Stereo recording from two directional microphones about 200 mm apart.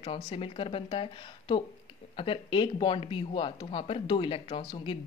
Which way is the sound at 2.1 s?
25° left (ahead or behind).